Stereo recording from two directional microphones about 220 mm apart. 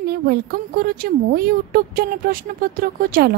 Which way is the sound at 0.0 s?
45° right (ahead or behind).